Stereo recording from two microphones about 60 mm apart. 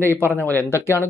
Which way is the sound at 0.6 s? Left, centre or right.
Left.